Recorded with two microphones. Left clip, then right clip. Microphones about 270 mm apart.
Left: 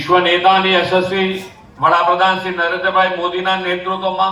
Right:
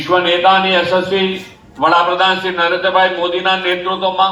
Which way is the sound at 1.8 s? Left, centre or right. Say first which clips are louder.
Right 1 dB; right.